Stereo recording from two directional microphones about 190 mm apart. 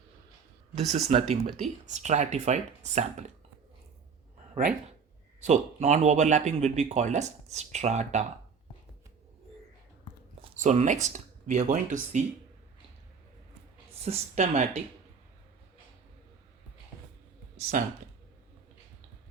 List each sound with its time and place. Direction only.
0.8 s speech: 35° right (ahead or behind)
5.4 s speech: 35° right (ahead or behind)
10.5 s speech: 40° right (ahead or behind)
14.0 s speech: 35° right (ahead or behind)
17.7 s speech: 45° right (ahead or behind)